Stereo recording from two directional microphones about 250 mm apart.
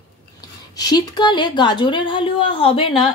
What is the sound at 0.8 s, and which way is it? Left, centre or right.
Speech, centre.